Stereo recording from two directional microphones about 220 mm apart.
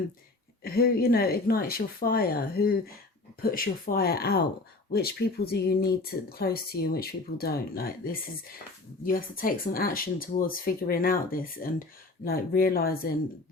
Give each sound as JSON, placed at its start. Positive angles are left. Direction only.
{"t": 0.6, "sound": "speech", "side_deg": 45}